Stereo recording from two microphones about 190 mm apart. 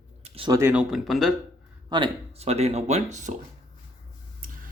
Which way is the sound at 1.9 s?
30° right (ahead or behind).